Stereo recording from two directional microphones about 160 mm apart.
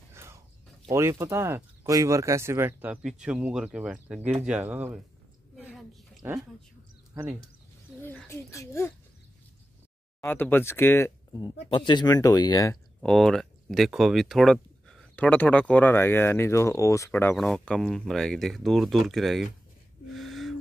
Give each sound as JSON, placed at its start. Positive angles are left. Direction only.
{"t": 0.1, "sound": "a sound", "side_deg": -15}
{"t": 0.8, "sound": "speech", "side_deg": -20}
{"t": 5.6, "sound": "a sound", "side_deg": -10}
{"t": 8.0, "sound": "a child's voice", "side_deg": 10}
{"t": 10.2, "sound": "speech", "side_deg": 15}
{"t": 11.7, "sound": "speech", "side_deg": 30}
{"t": 13.0, "sound": "speech", "side_deg": 5}
{"t": 17.4, "sound": "speech", "side_deg": 0}
{"t": 20.2, "sound": "a sound", "side_deg": 0}